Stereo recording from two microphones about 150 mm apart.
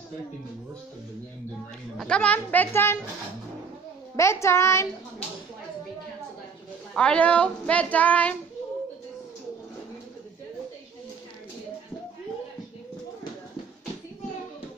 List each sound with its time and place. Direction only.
2.0 s a woman's voice: 5° left (ahead or behind)
4.2 s a child's voice: 20° left (ahead or behind)
6.9 s a woman's voice: 5° left (ahead or behind)